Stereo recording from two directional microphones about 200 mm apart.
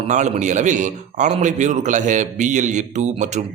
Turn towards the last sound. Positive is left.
turn(degrees=-35)  # may be behind; listen again after turning